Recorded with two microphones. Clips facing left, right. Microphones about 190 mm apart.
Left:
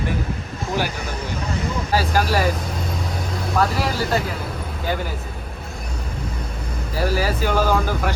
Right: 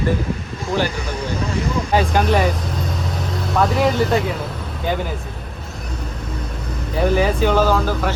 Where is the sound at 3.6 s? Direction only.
Centre (ahead or behind).